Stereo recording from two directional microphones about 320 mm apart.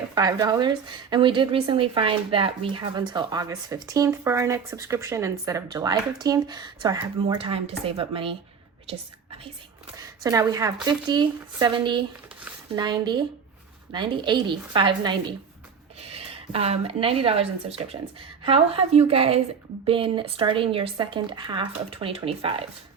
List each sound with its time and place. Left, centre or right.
0.1 s speech: centre